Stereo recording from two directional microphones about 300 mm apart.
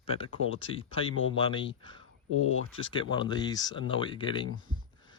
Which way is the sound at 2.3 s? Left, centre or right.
Left.